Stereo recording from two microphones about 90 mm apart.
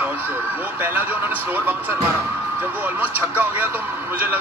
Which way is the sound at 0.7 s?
20° right (ahead or behind).